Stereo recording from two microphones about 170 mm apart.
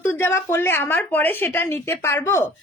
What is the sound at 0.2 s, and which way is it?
Speech, 15° left (ahead or behind).